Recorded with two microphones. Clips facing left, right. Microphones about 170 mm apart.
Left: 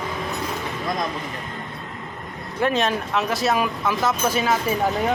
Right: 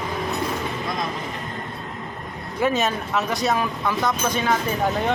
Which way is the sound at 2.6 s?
5° right (ahead or behind).